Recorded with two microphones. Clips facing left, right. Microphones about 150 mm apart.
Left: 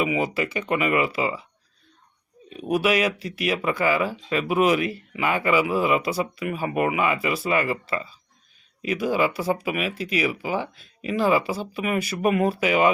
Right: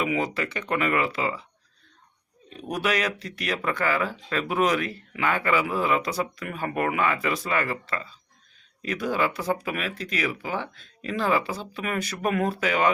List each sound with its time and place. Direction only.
0.0 s speech: 10° left (ahead or behind)
2.5 s speech: 10° left (ahead or behind)